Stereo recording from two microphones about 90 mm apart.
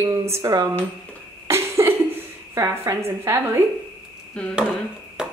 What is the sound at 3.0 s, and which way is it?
Speech, 25° right (ahead or behind).